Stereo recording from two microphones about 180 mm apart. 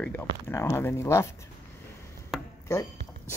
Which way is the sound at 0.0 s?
10° left (ahead or behind).